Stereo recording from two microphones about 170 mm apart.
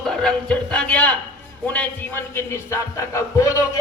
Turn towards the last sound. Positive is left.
turn(degrees=20)  # may be behind; listen again after turning